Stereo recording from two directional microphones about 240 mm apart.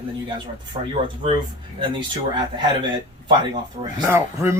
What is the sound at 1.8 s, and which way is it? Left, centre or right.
Speech, centre.